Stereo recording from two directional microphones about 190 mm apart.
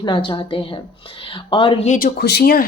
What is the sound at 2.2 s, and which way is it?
Speech, 55° left (ahead or behind).